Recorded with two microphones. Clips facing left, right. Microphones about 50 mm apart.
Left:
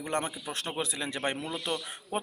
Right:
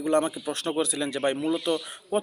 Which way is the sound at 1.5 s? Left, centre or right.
Centre.